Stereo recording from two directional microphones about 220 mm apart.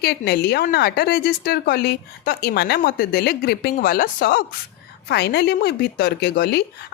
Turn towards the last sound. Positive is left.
turn(degrees=45)  # may be behind; listen again after turning